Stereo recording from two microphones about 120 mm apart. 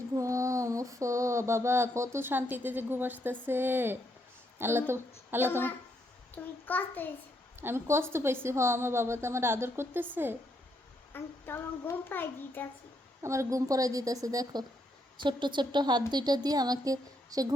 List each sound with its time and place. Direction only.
0.2 s a sound: 25° right (ahead or behind)
3.4 s a woman's voice: 20° right (ahead or behind)
5.5 s child singing: 15° left (ahead or behind)
7.6 s a woman's voice: 20° right (ahead or behind)
11.1 s child singing: 20° left (ahead or behind)
13.2 s a woman's voice: 25° right (ahead or behind)
15.2 s a woman's voice: 40° right (ahead or behind)